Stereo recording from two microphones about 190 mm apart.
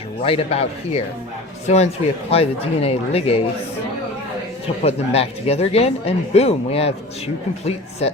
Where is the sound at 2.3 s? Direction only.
30° left (ahead or behind).